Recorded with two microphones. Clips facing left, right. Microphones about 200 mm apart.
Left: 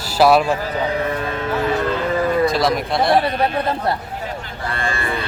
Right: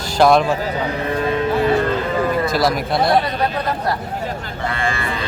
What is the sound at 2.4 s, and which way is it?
Speech, centre (ahead or behind).